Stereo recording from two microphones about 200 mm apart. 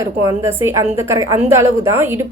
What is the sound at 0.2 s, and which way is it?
A woman's voice, 15° right (ahead or behind).